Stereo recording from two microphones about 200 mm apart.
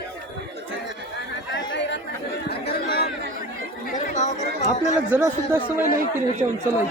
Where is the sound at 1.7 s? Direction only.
60° left (ahead or behind).